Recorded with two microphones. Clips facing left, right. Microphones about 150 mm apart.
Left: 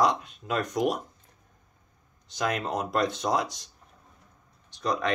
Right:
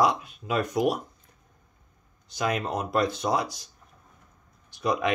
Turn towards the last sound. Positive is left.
turn(degrees=-10)  # may be behind; listen again after turning